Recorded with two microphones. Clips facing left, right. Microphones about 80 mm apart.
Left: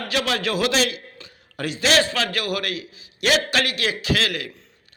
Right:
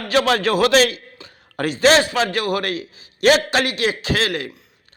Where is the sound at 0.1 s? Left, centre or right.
Right.